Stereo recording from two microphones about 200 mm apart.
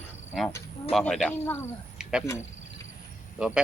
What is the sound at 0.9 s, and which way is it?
Speech, centre (ahead or behind).